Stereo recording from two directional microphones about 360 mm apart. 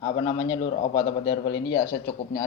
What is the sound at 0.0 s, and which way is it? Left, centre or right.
Speech, centre.